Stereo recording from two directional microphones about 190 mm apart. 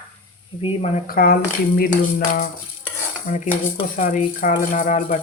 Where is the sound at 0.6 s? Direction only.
35° left (ahead or behind).